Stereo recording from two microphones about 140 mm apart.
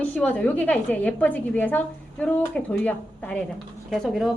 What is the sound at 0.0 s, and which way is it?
A woman's voice, 10° left (ahead or behind).